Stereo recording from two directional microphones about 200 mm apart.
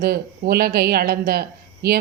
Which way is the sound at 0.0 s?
50° right (ahead or behind).